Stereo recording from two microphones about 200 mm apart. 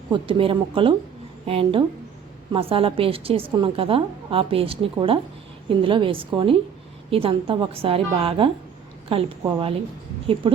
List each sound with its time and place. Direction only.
0.1 s a woman's voice: 25° right (ahead or behind)